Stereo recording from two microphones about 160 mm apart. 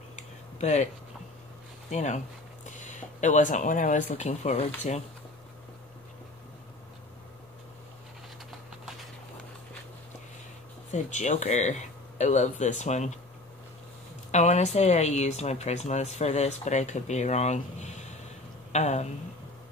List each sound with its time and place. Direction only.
0.1 s a sound: 45° left (ahead or behind)
1.9 s speech: 45° left (ahead or behind)
10.9 s speech: 45° left (ahead or behind)
14.3 s speech: 45° left (ahead or behind)